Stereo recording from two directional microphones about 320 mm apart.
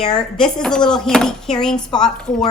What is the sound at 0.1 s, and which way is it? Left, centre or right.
A woman's voice, centre.